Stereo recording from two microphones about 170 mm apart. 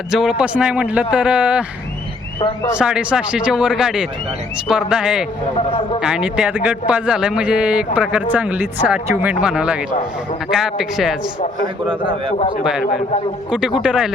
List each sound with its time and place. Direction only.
0.1 s speech: 5° right (ahead or behind)
2.7 s a man's voice: 5° right (ahead or behind)
5.5 s a man's voice: 35° left (ahead or behind)
6.0 s a man's voice: 5° right (ahead or behind)
11.9 s a man's voice: 30° right (ahead or behind)
12.8 s a man's voice: 40° left (ahead or behind)
13.5 s a man's voice: 5° right (ahead or behind)